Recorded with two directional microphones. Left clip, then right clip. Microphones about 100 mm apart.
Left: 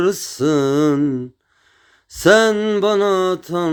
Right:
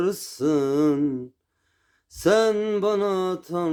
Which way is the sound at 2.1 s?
35° left (ahead or behind).